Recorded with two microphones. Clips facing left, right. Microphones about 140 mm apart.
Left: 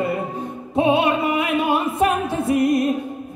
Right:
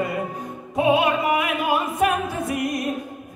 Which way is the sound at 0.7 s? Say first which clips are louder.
Left 1 dB; 30° left (ahead or behind).